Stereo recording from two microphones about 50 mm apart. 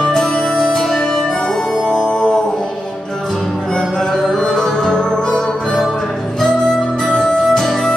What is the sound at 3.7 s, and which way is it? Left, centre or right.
Music, centre.